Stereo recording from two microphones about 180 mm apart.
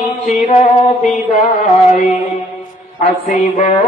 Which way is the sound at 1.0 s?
40° left (ahead or behind).